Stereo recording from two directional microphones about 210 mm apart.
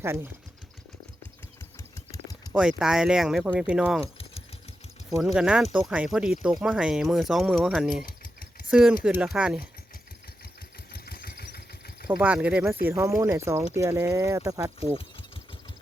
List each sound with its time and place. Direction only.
0.0 s speech: 10° right (ahead or behind)
2.1 s a sound: 15° left (ahead or behind)
2.5 s speech: 5° right (ahead or behind)
4.0 s keys jangling: 30° left (ahead or behind)
5.2 s speech: 5° right (ahead or behind)
8.2 s a sound: 40° left (ahead or behind)
8.7 s speech: 5° right (ahead or behind)
10.9 s engine: 45° left (ahead or behind)
12.0 s speech: 5° right (ahead or behind)